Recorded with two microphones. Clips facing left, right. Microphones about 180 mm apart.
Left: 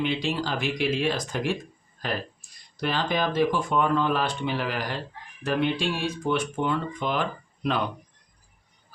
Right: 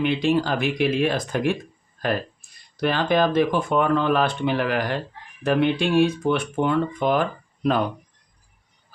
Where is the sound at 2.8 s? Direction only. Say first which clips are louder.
Right 6 dB; 55° right (ahead or behind).